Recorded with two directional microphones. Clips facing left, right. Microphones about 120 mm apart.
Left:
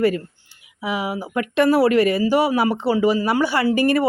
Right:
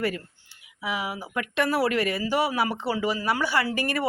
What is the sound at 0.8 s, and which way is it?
Speech, 25° left (ahead or behind).